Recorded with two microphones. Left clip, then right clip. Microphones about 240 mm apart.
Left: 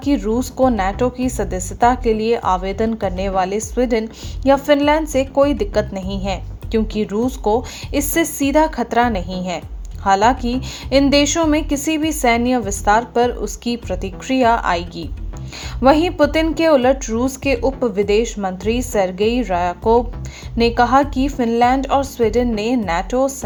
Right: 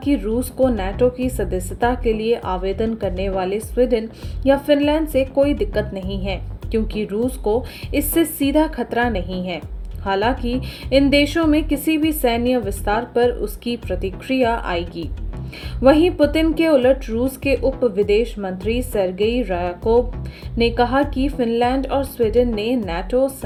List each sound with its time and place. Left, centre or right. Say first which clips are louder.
0.0 s a woman's voice: left 2 dB; centre